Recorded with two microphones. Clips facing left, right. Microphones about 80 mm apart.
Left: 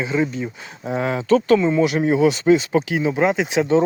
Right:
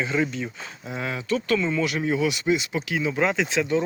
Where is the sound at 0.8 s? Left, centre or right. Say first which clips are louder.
Left 9 dB; left.